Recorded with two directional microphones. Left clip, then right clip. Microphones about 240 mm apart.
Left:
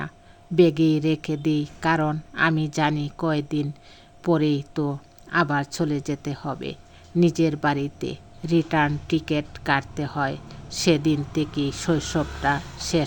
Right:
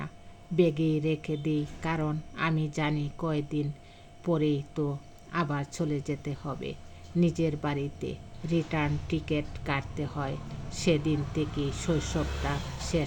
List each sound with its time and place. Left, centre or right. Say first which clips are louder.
0.5 s speech: left 8 dB; left